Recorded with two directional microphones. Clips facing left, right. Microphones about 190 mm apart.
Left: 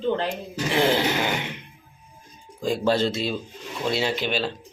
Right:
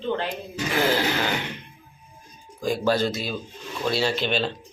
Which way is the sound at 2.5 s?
25° left (ahead or behind).